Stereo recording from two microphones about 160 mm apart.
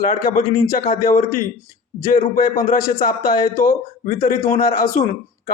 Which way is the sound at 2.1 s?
55° left (ahead or behind).